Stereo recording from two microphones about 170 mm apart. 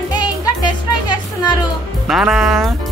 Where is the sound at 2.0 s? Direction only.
5° right (ahead or behind).